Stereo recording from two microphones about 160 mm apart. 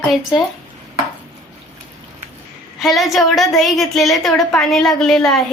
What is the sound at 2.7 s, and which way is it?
A woman's voice, centre (ahead or behind).